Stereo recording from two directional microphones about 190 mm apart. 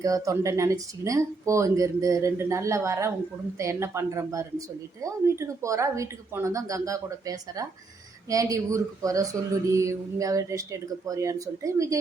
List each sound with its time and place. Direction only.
0.0 s speech: 15° right (ahead or behind)